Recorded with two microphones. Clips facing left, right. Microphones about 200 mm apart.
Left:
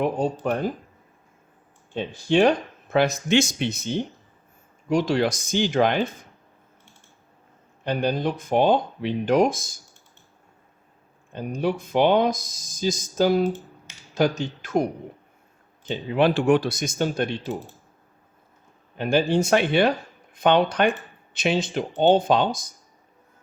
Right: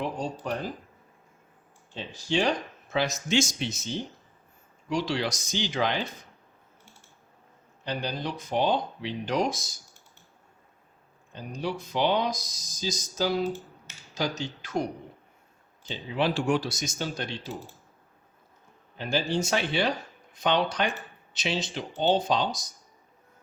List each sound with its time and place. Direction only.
0.0 s speech: 55° left (ahead or behind)
1.9 s speech: 55° left (ahead or behind)
7.9 s speech: 55° left (ahead or behind)
11.3 s speech: 55° left (ahead or behind)
18.9 s speech: 55° left (ahead or behind)